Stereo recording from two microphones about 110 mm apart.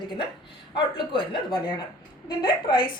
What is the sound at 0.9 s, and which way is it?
A woman's voice, 50° left (ahead or behind).